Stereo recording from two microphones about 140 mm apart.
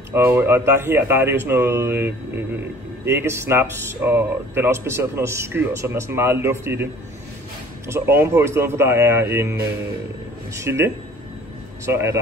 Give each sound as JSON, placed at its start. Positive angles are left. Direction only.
{"t": 0.1, "sound": "speech", "side_deg": -15}
{"t": 7.9, "sound": "speech", "side_deg": -20}